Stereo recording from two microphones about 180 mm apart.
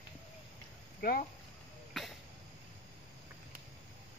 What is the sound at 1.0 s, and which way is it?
Speech, 55° left (ahead or behind).